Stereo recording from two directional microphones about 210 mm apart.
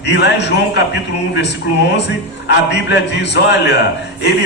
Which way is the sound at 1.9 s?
55° left (ahead or behind).